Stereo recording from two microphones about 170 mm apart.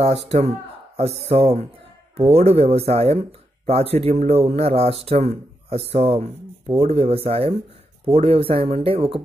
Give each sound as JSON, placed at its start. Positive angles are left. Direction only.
{"t": 0.0, "sound": "speech", "side_deg": -40}